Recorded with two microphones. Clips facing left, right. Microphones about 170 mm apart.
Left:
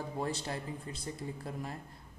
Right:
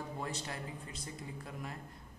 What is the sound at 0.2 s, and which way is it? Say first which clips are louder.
A man's voice: left 8 dB; 30° left (ahead or behind).